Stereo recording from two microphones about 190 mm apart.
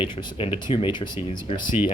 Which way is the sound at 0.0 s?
25° left (ahead or behind).